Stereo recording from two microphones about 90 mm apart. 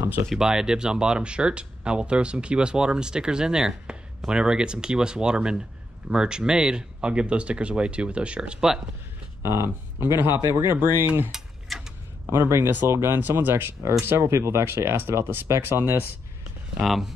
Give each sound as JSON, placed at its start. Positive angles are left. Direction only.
{"t": 0.0, "sound": "speech", "side_deg": -25}
{"t": 0.3, "sound": "speech", "side_deg": -5}
{"t": 9.4, "sound": "speech", "side_deg": -30}
{"t": 11.3, "sound": "a sound", "side_deg": -5}
{"t": 12.3, "sound": "speech", "side_deg": -30}
{"t": 16.8, "sound": "speech", "side_deg": 0}